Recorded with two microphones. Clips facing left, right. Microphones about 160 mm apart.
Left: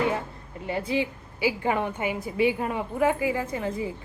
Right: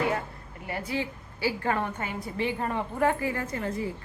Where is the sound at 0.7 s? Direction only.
20° left (ahead or behind).